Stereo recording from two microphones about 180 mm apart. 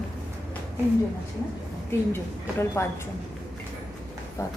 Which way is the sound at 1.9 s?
10° left (ahead or behind).